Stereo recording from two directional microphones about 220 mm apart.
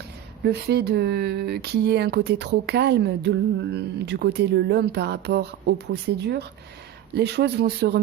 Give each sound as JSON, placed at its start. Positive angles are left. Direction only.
{"t": 0.4, "sound": "speech", "side_deg": -50}